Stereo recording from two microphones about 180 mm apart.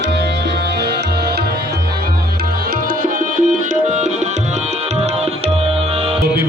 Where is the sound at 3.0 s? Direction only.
50° right (ahead or behind).